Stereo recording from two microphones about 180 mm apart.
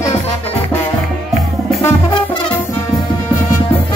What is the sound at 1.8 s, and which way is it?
Brass instrument, 25° left (ahead or behind).